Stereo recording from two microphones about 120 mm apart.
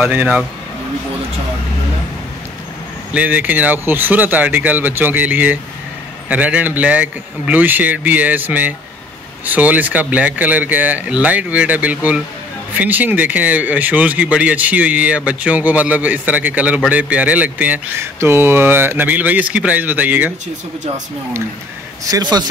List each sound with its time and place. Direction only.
0.0 s speech: 15° right (ahead or behind)
3.1 s speech: 10° right (ahead or behind)
22.0 s speech: 30° right (ahead or behind)